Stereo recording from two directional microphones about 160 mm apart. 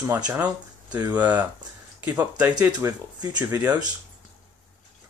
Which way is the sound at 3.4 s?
10° right (ahead or behind).